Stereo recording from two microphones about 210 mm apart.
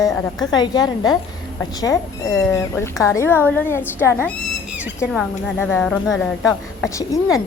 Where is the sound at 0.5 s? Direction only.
20° left (ahead or behind).